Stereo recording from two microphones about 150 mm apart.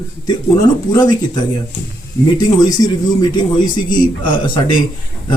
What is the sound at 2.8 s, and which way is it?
Speech, 25° left (ahead or behind).